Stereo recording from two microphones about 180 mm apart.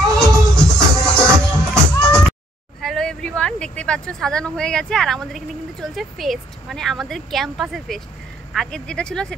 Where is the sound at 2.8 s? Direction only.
5° left (ahead or behind).